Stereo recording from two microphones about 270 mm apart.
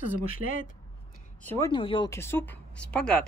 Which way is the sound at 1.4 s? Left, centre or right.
Centre.